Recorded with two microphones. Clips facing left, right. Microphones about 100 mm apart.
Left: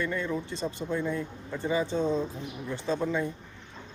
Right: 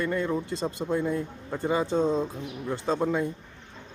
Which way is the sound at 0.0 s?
45° right (ahead or behind).